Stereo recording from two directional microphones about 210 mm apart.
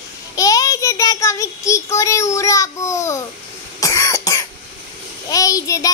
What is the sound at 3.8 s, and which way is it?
Cough, 15° left (ahead or behind).